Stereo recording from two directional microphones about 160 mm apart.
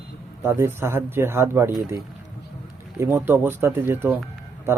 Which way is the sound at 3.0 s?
15° right (ahead or behind).